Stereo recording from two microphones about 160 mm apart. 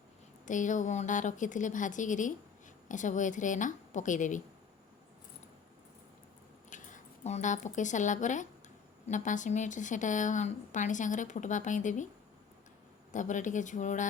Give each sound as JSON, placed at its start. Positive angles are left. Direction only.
{"t": 0.4, "sound": "speech", "side_deg": 50}
{"t": 6.7, "sound": "speech", "side_deg": 50}
{"t": 13.1, "sound": "speech", "side_deg": 50}